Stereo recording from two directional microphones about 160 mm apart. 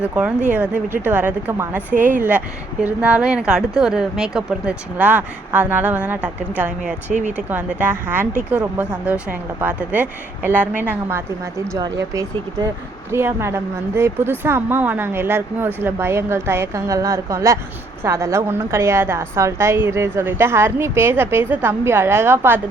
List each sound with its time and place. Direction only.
0.0 s a woman's voice: 10° right (ahead or behind)
7.1 s speech: 50° right (ahead or behind)
7.3 s a woman's voice: 10° right (ahead or behind)
13.1 s a woman's voice: 15° right (ahead or behind)